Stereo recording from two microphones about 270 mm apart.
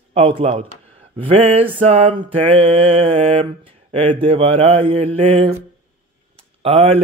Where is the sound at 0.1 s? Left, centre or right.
Right.